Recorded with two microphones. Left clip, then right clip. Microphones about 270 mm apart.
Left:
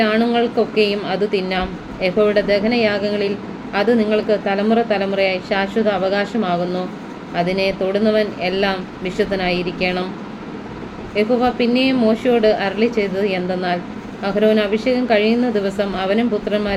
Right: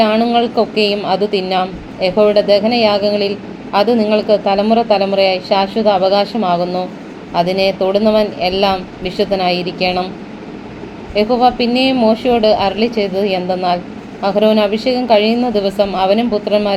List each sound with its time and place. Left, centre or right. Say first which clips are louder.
0.0 s a woman's voice: right 4 dB; centre
11.1 s a woman's voice: right 5 dB; centre